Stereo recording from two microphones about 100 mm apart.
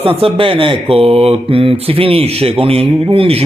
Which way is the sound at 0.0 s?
70° right (ahead or behind).